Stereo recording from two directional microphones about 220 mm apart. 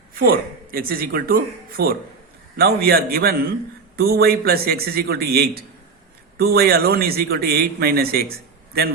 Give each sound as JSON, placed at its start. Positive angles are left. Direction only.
{"t": 0.1, "sound": "a man's voice", "side_deg": -40}